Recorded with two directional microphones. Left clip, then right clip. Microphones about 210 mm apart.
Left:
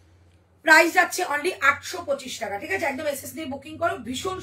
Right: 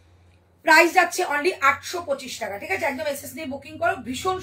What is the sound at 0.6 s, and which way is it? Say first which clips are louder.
A woman's voice: right 1 dB; 20° left (ahead or behind).